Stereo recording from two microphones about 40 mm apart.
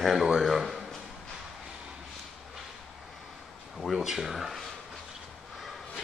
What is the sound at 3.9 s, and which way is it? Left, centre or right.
Speech, centre.